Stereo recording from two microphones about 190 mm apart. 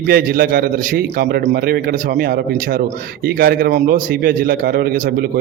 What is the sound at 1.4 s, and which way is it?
A man's voice, 40° right (ahead or behind).